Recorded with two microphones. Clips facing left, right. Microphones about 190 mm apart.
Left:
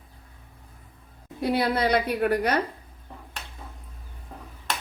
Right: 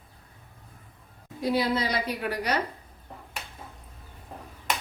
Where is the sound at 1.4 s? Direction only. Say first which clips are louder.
Left 2 dB; 60° left (ahead or behind).